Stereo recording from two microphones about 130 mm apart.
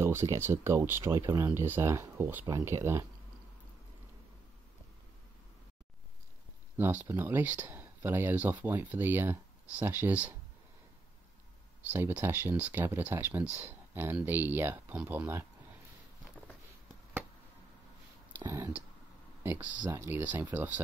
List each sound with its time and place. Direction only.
0.0 s speech: 20° right (ahead or behind)
6.8 s speech: 15° right (ahead or behind)
11.9 s speech: 15° right (ahead or behind)
18.4 s speech: 25° right (ahead or behind)
19.4 s speech: 15° right (ahead or behind)